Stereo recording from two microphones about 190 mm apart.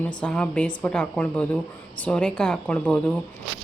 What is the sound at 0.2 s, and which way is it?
A woman's voice, 5° left (ahead or behind).